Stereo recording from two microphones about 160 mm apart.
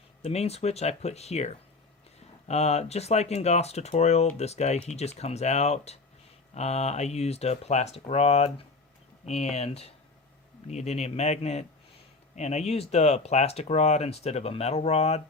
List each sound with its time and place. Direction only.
0.2 s speech: 40° left (ahead or behind)